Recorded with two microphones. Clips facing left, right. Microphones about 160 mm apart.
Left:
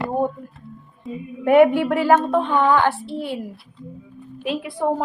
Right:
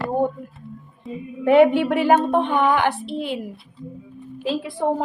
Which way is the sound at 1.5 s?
20° right (ahead or behind).